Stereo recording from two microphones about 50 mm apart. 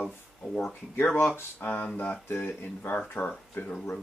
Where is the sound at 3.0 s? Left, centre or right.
Left.